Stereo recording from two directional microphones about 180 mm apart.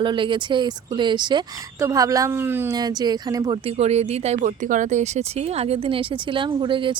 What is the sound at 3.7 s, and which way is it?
Speech, 35° right (ahead or behind).